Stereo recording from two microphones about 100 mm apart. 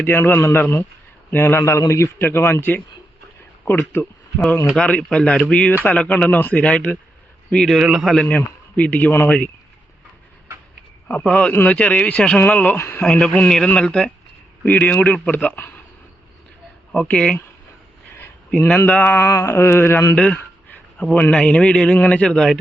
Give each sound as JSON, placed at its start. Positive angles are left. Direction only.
{"t": 0.0, "sound": "a sound", "side_deg": 20}
{"t": 4.8, "sound": "a man's voice", "side_deg": 10}
{"t": 8.1, "sound": "a man's voice", "side_deg": 10}
{"t": 11.2, "sound": "a man's voice", "side_deg": 10}
{"t": 16.9, "sound": "a man's voice", "side_deg": 10}
{"t": 18.9, "sound": "a sound", "side_deg": 15}
{"t": 20.1, "sound": "a man's voice", "side_deg": 10}